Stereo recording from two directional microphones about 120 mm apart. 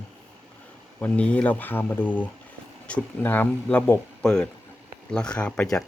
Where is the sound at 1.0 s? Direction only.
10° left (ahead or behind).